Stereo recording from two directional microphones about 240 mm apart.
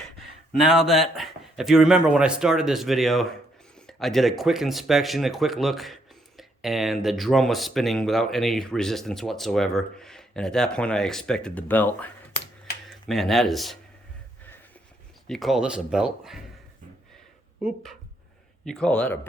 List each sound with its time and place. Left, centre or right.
0.0 s speech: centre
15.3 s speech: centre
18.6 s speech: centre